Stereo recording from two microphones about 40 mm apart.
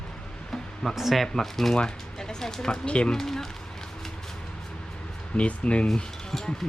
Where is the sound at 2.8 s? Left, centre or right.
Left.